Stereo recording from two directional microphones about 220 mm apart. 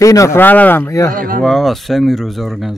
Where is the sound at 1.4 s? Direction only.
Centre (ahead or behind).